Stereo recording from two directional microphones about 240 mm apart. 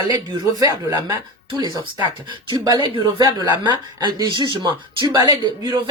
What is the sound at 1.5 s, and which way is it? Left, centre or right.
Speech, centre.